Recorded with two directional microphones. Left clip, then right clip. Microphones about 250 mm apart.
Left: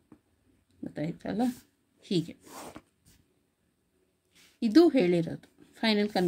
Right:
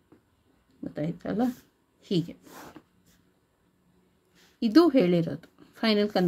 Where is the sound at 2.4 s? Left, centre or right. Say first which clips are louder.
Left 1 dB; left.